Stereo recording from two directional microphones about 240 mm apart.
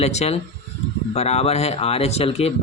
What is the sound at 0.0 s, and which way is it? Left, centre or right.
Speech, left.